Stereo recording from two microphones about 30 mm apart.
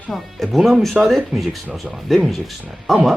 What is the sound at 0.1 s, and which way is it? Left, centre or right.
Speech, centre.